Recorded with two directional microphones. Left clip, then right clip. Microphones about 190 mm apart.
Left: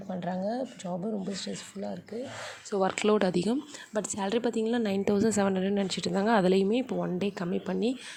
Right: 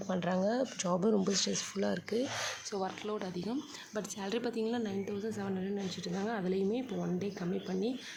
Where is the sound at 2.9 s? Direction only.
45° left (ahead or behind).